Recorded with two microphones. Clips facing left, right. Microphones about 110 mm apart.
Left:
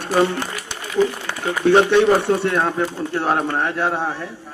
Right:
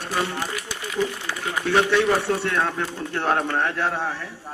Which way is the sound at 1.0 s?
25° left (ahead or behind).